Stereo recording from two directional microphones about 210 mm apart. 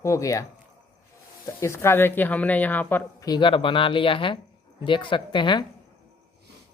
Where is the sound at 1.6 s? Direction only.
15° left (ahead or behind).